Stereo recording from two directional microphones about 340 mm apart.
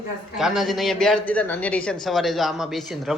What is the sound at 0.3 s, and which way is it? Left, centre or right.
A man's voice, centre.